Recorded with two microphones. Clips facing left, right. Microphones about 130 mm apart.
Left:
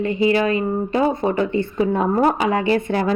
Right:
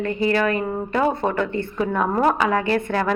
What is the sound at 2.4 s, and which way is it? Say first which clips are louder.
Speech: left 1 dB; 50° right (ahead or behind).